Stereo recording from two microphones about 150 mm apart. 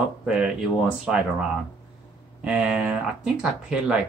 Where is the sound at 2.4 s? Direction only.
5° right (ahead or behind).